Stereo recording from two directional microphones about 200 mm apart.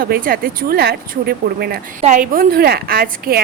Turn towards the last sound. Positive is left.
turn(degrees=-50)  # may be behind; listen again after turning